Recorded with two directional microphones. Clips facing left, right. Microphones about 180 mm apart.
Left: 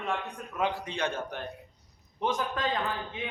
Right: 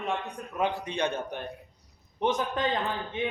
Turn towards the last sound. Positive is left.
turn(degrees=-20)  # may be behind; listen again after turning